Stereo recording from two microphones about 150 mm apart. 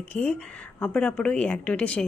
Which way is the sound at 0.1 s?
10° left (ahead or behind).